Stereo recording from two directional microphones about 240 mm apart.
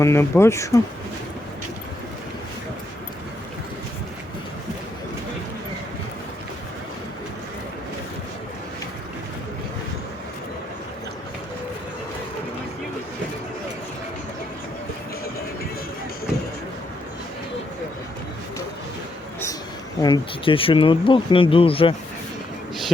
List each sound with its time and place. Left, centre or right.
0.0 s speech: centre
20.0 s speech: centre